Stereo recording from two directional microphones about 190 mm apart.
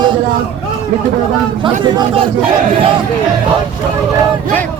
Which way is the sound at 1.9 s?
30° right (ahead or behind).